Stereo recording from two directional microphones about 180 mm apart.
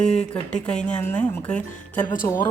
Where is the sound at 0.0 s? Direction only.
5° left (ahead or behind).